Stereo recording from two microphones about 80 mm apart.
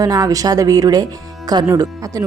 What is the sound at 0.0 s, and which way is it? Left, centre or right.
A woman's voice, right.